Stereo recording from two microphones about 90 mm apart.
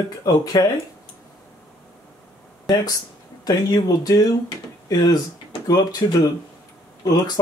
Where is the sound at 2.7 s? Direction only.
45° left (ahead or behind).